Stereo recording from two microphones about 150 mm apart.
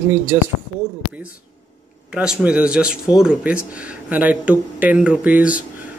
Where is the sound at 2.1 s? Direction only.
5° right (ahead or behind).